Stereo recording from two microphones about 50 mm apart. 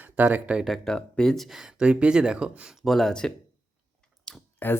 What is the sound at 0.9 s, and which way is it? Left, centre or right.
Speech, centre.